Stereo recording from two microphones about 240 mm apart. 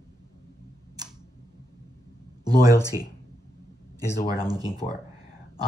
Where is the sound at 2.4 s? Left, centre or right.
Centre.